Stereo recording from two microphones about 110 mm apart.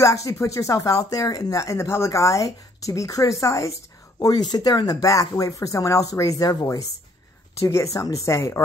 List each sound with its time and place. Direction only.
0.0 s speech: 30° left (ahead or behind)
4.2 s speech: 35° left (ahead or behind)